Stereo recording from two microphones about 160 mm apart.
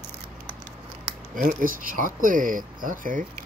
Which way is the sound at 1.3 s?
60° right (ahead or behind).